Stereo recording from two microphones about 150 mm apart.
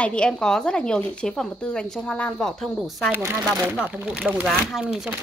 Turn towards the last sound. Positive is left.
turn(degrees=-5)  # may be behind; listen again after turning